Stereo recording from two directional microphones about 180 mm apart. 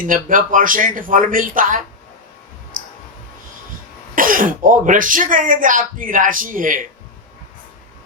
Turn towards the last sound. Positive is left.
turn(degrees=-50)  # may be behind; listen again after turning